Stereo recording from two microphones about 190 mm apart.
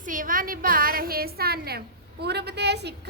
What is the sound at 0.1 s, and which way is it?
A woman's voice, 45° right (ahead or behind).